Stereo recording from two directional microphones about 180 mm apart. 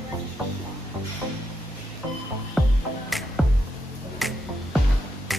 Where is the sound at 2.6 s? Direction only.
Centre (ahead or behind).